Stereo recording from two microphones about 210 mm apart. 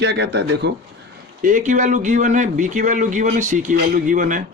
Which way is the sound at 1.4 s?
40° right (ahead or behind).